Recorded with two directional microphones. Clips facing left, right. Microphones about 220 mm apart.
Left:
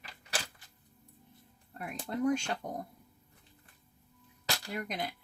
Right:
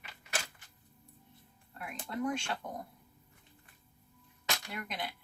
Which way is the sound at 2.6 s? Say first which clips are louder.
Left 3 dB; 35° left (ahead or behind).